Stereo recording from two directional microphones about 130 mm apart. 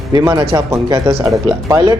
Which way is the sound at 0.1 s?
30° right (ahead or behind).